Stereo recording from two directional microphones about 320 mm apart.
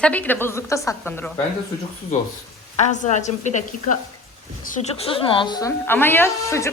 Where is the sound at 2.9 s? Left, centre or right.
Left.